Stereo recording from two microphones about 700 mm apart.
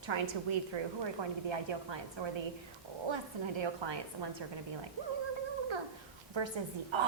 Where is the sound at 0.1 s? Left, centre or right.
Right.